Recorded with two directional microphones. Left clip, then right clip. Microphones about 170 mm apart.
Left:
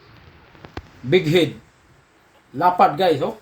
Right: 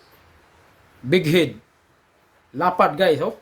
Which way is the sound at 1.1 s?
55° right (ahead or behind).